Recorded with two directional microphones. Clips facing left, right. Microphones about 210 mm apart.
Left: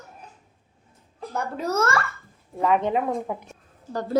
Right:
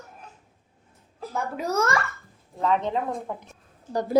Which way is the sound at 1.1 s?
Centre (ahead or behind).